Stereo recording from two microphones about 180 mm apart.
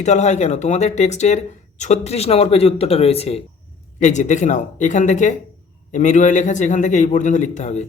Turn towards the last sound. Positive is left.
turn(degrees=40)  # may be behind; listen again after turning